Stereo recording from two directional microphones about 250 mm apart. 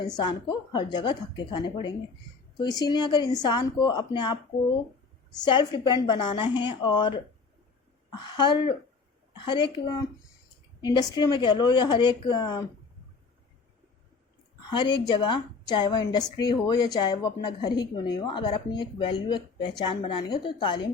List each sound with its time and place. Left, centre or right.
0.2 s a woman's voice: centre
5.5 s a woman's voice: centre
8.1 s a woman's voice: centre
14.7 s a woman's voice: centre